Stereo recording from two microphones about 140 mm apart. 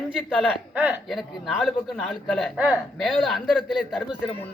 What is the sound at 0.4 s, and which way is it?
Speech, 10° right (ahead or behind).